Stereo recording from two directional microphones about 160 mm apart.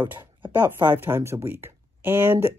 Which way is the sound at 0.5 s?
15° right (ahead or behind).